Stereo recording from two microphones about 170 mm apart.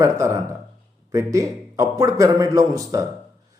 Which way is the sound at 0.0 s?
15° right (ahead or behind).